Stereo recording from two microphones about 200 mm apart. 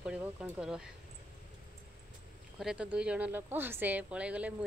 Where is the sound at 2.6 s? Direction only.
5° right (ahead or behind).